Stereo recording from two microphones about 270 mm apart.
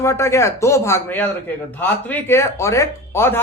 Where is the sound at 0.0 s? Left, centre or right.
Centre.